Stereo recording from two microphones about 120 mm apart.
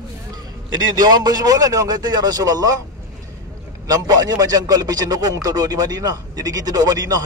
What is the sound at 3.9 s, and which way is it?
A man's voice, 35° right (ahead or behind).